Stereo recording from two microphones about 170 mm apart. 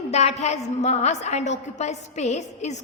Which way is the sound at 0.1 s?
40° left (ahead or behind).